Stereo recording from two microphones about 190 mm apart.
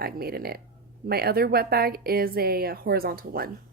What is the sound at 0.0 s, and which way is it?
Speech, 55° right (ahead or behind).